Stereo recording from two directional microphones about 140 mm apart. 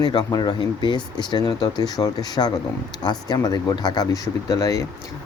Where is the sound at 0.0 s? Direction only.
30° left (ahead or behind).